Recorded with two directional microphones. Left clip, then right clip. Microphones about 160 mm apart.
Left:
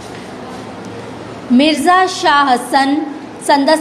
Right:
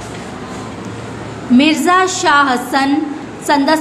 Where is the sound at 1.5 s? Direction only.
15° left (ahead or behind).